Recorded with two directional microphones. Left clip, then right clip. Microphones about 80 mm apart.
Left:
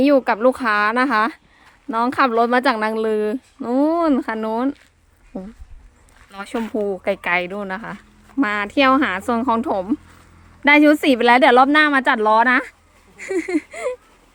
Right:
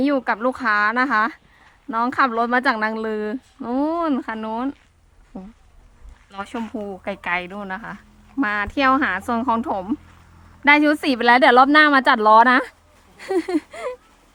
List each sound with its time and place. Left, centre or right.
0.0 s a woman's voice: centre
3.8 s a woman's voice: left; by 10.0 s centre
10.6 s a woman's voice: left
11.2 s speech: centre